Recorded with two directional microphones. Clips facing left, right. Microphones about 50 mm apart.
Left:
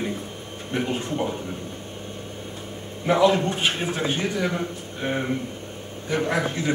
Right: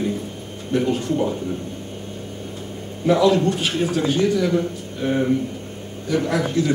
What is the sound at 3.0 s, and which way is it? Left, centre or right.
Speech, left.